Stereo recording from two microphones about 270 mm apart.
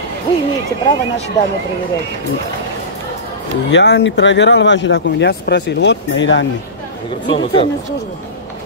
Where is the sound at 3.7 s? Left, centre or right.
Left.